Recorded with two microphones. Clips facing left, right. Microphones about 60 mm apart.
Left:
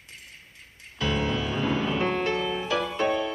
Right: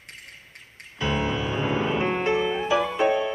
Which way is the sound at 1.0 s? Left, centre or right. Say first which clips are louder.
Right 1 dB; centre.